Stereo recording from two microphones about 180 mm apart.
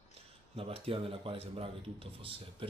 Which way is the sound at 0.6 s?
30° right (ahead or behind).